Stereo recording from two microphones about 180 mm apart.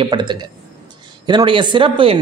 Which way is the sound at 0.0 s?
25° right (ahead or behind).